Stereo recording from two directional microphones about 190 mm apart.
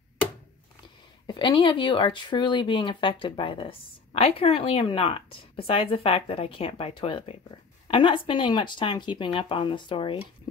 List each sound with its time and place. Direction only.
1.2 s speech: 25° left (ahead or behind)